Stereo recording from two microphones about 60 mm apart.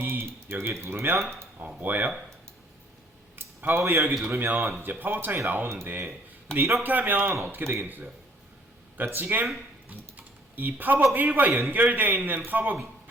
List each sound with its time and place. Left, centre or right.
0.0 s a sound: right
0.7 s speech: right
1.5 s speech: right
3.3 s a sound: right
4.4 s a man's voice: right
10.2 s typing: right
11.1 s a man's voice: right